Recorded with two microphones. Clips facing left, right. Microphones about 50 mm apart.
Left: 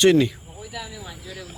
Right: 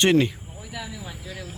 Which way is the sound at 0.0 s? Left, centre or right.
Right.